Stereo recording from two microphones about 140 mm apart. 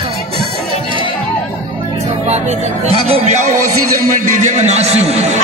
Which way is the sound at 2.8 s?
45° right (ahead or behind).